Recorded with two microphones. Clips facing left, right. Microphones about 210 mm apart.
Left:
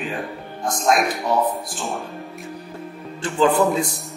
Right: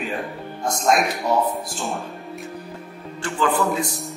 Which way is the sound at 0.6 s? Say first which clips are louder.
Even; centre (ahead or behind).